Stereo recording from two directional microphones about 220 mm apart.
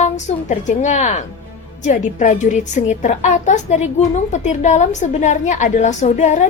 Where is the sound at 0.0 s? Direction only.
30° left (ahead or behind).